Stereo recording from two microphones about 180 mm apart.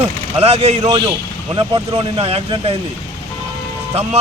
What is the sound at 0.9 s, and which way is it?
Speech, 20° right (ahead or behind).